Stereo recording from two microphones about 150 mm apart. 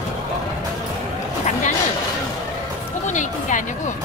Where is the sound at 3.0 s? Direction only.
55° left (ahead or behind).